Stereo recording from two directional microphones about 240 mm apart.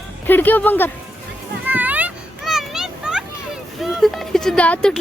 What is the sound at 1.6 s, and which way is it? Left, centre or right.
Children playing, centre.